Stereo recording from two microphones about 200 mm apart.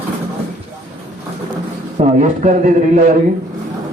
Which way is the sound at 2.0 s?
35° right (ahead or behind).